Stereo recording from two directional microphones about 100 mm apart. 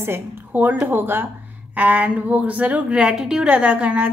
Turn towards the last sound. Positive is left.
turn(degrees=-15)  # may be behind; listen again after turning